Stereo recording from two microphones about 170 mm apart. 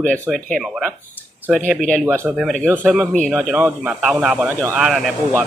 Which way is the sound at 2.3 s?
Centre (ahead or behind).